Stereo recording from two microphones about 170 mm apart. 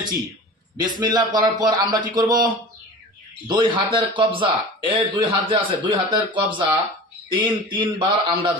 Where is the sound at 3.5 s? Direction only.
30° right (ahead or behind).